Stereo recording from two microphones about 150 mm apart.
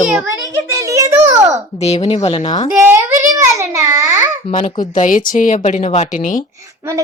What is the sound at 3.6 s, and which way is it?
Speech, 20° right (ahead or behind).